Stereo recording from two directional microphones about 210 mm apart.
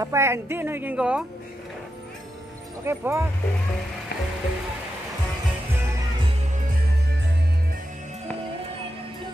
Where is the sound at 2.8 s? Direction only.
10° right (ahead or behind).